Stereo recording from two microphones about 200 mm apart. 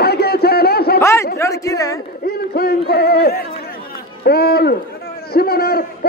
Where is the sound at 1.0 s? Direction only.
15° left (ahead or behind).